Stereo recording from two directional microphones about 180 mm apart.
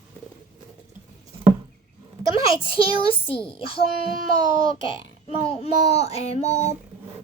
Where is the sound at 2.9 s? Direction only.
30° left (ahead or behind).